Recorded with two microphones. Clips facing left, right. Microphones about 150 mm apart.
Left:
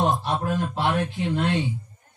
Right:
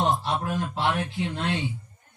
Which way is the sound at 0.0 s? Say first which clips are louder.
Left 2 dB; 15° left (ahead or behind).